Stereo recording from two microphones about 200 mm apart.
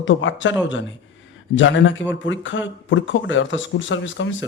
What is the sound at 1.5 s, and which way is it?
Speech, 65° left (ahead or behind).